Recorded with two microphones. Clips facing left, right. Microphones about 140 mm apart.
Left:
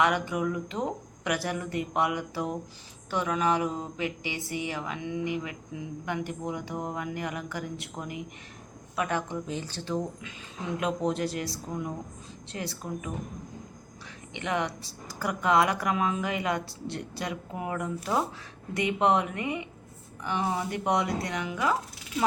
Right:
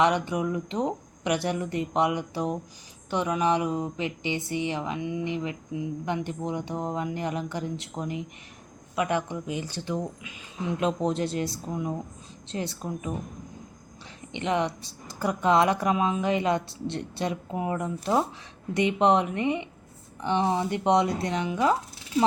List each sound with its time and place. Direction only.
0.0 s a woman's voice: 20° right (ahead or behind)
14.3 s a woman's voice: 20° right (ahead or behind)